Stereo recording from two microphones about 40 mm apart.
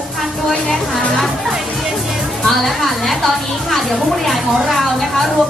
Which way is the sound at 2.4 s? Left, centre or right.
Centre.